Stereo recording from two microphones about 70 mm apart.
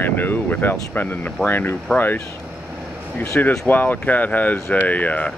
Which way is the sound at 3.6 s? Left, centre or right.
Left.